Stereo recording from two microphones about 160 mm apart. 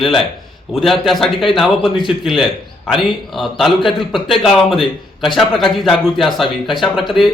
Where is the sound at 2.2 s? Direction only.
Centre (ahead or behind).